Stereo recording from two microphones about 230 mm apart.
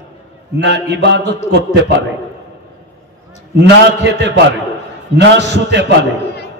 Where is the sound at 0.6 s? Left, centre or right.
Right.